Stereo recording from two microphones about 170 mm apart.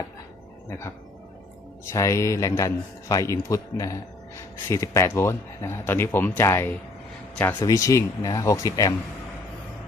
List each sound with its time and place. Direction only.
1.8 s speech: 15° left (ahead or behind)